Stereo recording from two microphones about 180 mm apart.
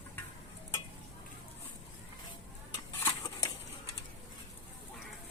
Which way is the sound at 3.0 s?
20° left (ahead or behind).